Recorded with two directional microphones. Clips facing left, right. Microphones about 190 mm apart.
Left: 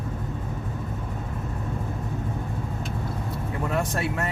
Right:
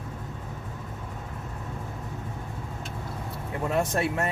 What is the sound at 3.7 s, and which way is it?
Speech, 25° right (ahead or behind).